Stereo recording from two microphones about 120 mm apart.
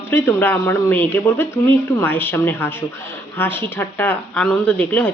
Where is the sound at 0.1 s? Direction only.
15° left (ahead or behind).